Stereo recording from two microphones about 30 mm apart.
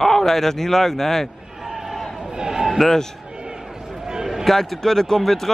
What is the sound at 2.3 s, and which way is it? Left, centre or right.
Speech, right.